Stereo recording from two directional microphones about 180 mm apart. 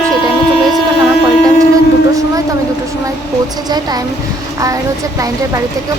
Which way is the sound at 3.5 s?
20° right (ahead or behind).